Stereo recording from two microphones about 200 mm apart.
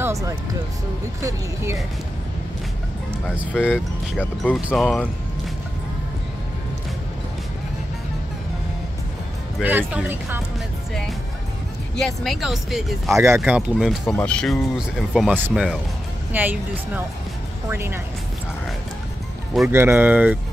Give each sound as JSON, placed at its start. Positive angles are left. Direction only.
{"t": 0.0, "sound": "music", "side_deg": -15}
{"t": 1.2, "sound": "speech", "side_deg": -15}
{"t": 3.7, "sound": "speech", "side_deg": 5}
{"t": 9.6, "sound": "speech", "side_deg": -10}
{"t": 11.9, "sound": "speech", "side_deg": 0}
{"t": 13.1, "sound": "speech", "side_deg": -15}
{"t": 13.4, "sound": "speech", "side_deg": -5}
{"t": 19.7, "sound": "speech", "side_deg": -10}